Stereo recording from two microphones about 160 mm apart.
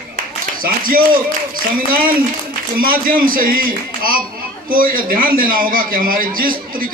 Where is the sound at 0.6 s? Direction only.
65° right (ahead or behind).